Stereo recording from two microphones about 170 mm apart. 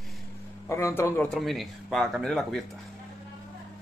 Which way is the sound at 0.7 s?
15° left (ahead or behind).